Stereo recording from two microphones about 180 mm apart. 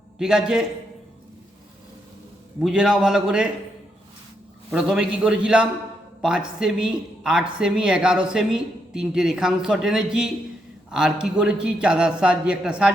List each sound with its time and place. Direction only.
0.2 s speech: 5° right (ahead or behind)
2.6 s speech: 5° right (ahead or behind)
4.7 s speech: 5° right (ahead or behind)